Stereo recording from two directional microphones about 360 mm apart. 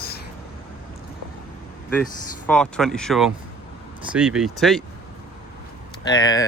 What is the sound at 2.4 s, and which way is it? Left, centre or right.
Speech, centre.